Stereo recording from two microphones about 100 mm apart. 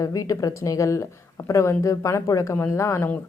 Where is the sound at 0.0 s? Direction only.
35° left (ahead or behind).